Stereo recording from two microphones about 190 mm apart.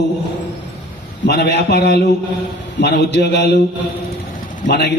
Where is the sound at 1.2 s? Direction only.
60° left (ahead or behind).